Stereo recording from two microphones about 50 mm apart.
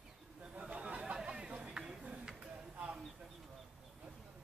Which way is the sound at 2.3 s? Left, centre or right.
Right.